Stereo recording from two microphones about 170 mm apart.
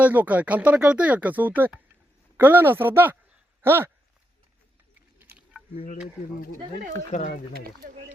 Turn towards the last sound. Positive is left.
turn(degrees=50)  # may be behind; listen again after turning